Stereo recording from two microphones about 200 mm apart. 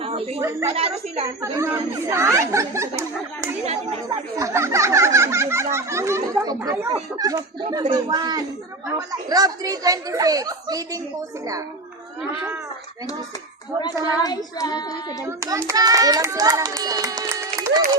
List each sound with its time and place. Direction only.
0.0 s a sound: 30° right (ahead or behind)
0.7 s speech: 30° right (ahead or behind)
1.4 s a child's voice: 15° right (ahead or behind)
4.4 s a child's voice: 15° right (ahead or behind)
13.8 s child singing: 20° left (ahead or behind)
15.2 s a child's voice: 15° right (ahead or behind)